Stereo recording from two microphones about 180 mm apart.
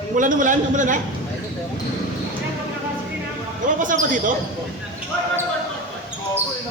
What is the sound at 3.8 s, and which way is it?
Speech, 45° right (ahead or behind).